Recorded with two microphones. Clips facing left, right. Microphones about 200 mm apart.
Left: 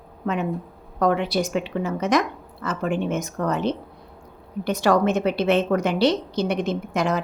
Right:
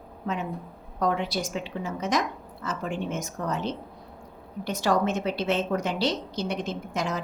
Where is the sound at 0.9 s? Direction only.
65° left (ahead or behind).